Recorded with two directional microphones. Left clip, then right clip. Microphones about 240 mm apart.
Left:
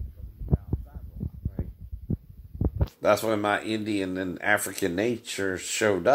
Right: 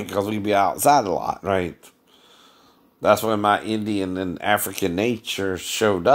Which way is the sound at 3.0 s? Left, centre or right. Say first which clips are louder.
Right 5 dB; right.